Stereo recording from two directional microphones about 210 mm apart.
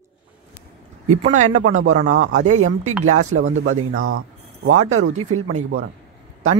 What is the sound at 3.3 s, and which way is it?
Speech, 75° right (ahead or behind).